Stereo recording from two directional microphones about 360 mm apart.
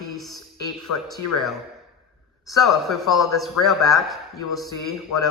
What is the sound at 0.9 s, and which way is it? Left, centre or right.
Speech, left.